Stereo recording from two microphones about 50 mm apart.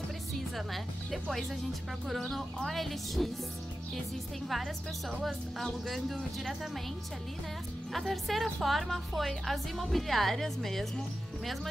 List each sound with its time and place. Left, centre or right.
1.3 s speech: centre
5.2 s speech: centre
7.9 s speech: centre